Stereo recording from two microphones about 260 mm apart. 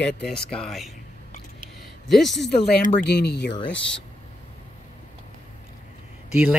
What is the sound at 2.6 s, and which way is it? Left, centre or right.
Speech, left.